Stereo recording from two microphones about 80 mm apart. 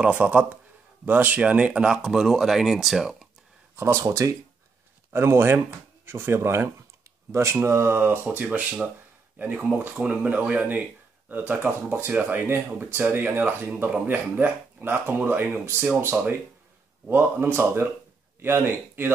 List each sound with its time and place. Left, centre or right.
0.0 s speech: centre
3.7 s speech: right
5.1 s speech: right
17.1 s speech: right